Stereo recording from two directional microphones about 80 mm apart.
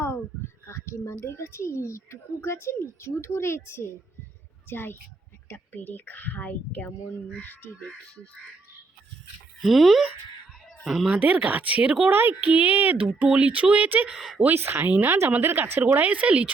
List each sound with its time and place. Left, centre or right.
0.0 s a sound: left
1.2 s a woman's voice: left; by 8.3 s centre
9.6 s speech: centre
11.2 s speech: centre
14.2 s speech: centre
14.4 s speech: right